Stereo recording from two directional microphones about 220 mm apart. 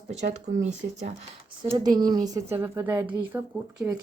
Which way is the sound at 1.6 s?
20° right (ahead or behind).